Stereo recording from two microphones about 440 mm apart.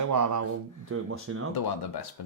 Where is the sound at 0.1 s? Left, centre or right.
Right.